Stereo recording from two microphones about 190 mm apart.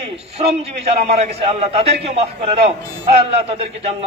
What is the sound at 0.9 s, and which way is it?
A man's voice, 35° right (ahead or behind).